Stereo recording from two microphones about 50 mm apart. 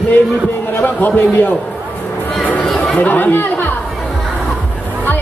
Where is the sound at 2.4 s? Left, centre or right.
Left.